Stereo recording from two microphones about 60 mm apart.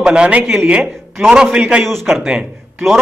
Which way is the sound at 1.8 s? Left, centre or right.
Centre.